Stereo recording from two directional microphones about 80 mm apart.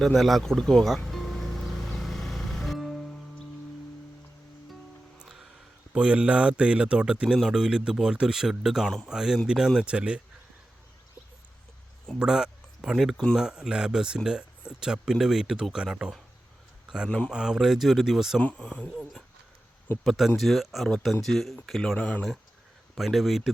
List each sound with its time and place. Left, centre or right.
0.0 s music: centre
5.9 s speech: centre
12.2 s speech: centre
17.1 s speech: centre
17.3 s speech: centre
18.3 s speech: centre
20.1 s speech: centre
21.9 s speech: left
23.0 s speech: centre